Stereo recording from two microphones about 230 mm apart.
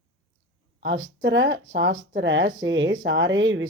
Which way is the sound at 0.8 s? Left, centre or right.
Right.